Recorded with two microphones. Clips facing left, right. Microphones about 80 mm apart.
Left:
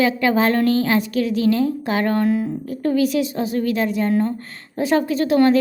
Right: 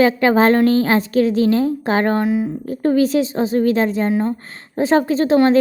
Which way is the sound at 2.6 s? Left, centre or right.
Right.